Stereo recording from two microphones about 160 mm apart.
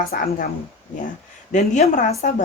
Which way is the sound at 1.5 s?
50° left (ahead or behind).